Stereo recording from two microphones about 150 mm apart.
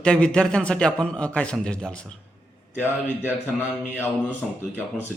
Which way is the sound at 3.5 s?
15° left (ahead or behind).